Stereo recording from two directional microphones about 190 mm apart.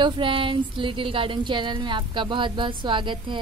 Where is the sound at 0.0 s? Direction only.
25° right (ahead or behind).